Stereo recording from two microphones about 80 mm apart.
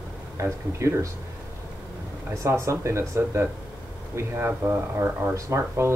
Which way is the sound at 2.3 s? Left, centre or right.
Right.